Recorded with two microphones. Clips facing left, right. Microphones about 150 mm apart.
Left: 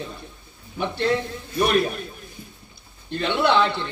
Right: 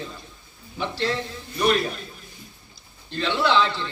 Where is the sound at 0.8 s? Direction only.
55° left (ahead or behind).